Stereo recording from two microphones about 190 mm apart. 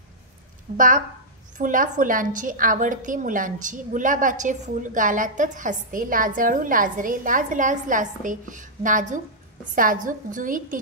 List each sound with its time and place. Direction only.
0.7 s a woman's voice: 45° right (ahead or behind)